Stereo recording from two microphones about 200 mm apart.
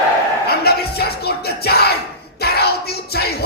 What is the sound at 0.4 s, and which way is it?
Music, 50° left (ahead or behind).